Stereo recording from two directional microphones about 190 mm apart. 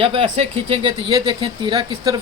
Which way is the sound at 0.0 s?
30° right (ahead or behind).